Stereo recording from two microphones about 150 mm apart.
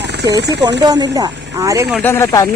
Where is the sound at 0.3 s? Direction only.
25° right (ahead or behind).